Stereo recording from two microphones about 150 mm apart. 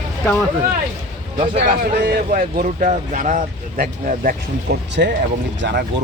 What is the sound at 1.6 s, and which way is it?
Speech, 75° right (ahead or behind).